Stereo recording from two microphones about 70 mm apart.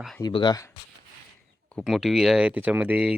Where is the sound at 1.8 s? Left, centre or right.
Centre.